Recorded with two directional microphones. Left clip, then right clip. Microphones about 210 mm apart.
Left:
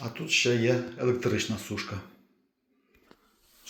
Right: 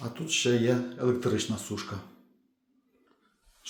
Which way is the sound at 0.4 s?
10° right (ahead or behind).